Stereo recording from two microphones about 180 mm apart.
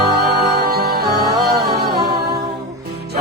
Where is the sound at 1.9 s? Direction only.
65° right (ahead or behind).